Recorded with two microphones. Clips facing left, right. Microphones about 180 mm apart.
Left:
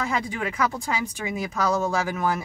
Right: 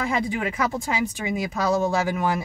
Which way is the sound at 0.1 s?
20° right (ahead or behind).